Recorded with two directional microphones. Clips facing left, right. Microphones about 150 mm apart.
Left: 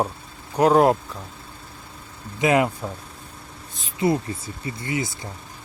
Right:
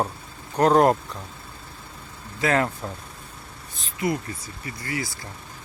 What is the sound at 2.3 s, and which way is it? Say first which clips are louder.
Speech: left 3 dB; 15° left (ahead or behind).